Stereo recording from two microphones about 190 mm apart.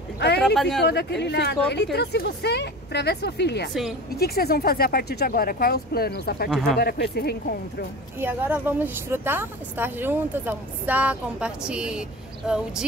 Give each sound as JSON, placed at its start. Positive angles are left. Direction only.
{"t": 0.6, "sound": "speech", "side_deg": 0}
{"t": 0.8, "sound": "speech", "side_deg": 65}
{"t": 6.5, "sound": "speech", "side_deg": 0}
{"t": 6.8, "sound": "speech", "side_deg": 55}
{"t": 8.2, "sound": "a woman's voice", "side_deg": -10}